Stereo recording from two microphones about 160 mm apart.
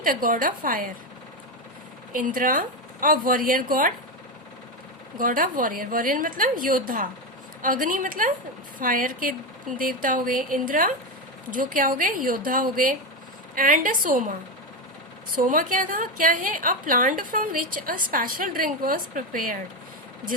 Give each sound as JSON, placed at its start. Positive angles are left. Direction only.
{"t": 0.0, "sound": "a woman's voice", "side_deg": -60}
{"t": 2.1, "sound": "a woman's voice", "side_deg": -55}
{"t": 5.1, "sound": "a woman's voice", "side_deg": -60}
{"t": 15.4, "sound": "a woman's voice", "side_deg": -55}